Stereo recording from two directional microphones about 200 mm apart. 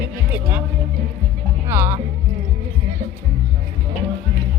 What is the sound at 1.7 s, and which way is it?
Music, 10° right (ahead or behind).